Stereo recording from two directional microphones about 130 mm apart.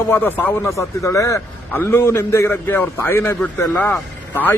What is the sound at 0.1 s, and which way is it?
A man's voice, 15° left (ahead or behind).